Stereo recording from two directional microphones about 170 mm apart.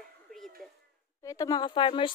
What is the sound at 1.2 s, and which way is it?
Speech, 20° left (ahead or behind).